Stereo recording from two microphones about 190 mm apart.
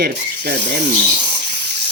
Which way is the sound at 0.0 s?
60° right (ahead or behind).